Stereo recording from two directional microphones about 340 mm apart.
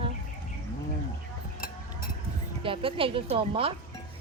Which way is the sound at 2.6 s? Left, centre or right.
Centre.